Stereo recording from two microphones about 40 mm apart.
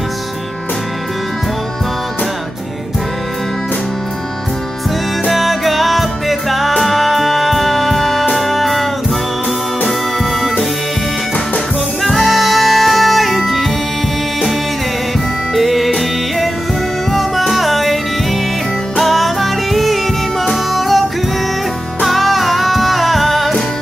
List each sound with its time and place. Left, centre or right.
5.3 s music: centre
9.8 s music: centre
12.0 s music: centre
15.5 s music: centre
18.9 s music: centre
22.0 s music: centre